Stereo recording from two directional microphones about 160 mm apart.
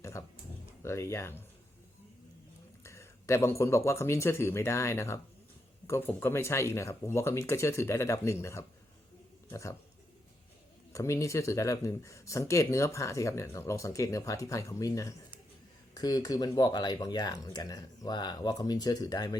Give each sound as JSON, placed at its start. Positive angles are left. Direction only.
{"t": 0.0, "sound": "a sound", "side_deg": 20}
{"t": 0.8, "sound": "speech", "side_deg": 15}
{"t": 2.8, "sound": "speech", "side_deg": 15}
{"t": 10.9, "sound": "speech", "side_deg": 20}